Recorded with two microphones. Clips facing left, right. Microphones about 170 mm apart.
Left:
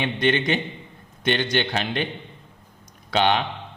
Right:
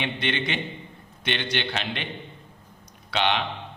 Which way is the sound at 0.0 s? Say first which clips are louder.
Left 6 dB; 45° left (ahead or behind).